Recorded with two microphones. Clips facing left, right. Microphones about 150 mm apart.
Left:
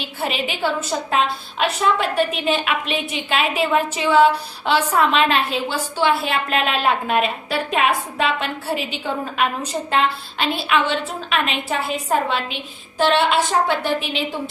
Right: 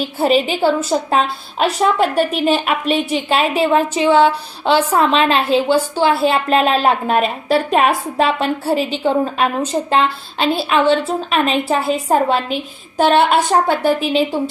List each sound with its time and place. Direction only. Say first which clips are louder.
0.2 s a woman's voice: right 9 dB; 35° right (ahead or behind)